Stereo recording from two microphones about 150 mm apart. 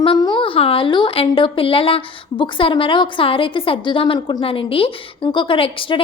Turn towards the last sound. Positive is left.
turn(degrees=35)  # may be behind; listen again after turning